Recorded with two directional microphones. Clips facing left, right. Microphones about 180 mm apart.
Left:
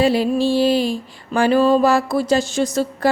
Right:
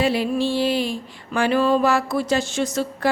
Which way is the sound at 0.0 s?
35° left (ahead or behind).